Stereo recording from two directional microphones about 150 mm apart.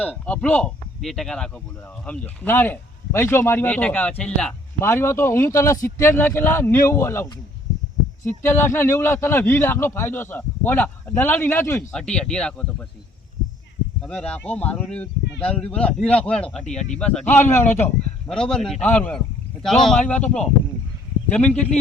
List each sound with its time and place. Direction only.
0.0 s a man's voice: 10° left (ahead or behind)
4.8 s a man's voice: 15° left (ahead or behind)
14.1 s a man's voice: 10° left (ahead or behind)
18.3 s a man's voice: 5° left (ahead or behind)